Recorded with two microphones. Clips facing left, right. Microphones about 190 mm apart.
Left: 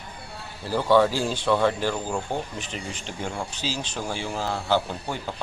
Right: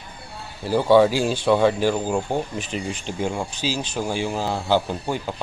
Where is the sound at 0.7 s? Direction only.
15° right (ahead or behind).